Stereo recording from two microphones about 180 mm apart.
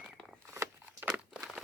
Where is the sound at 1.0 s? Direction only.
5° right (ahead or behind).